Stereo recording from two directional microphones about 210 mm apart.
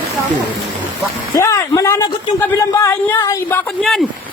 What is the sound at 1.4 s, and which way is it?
Speech, 15° left (ahead or behind).